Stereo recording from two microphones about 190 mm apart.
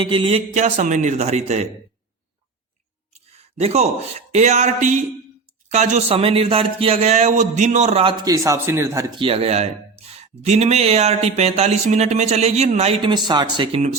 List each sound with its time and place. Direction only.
0.0 s speech: 25° right (ahead or behind)
3.3 s speech: 35° right (ahead or behind)
8.2 s speech: 15° right (ahead or behind)
9.1 s speech: 30° right (ahead or behind)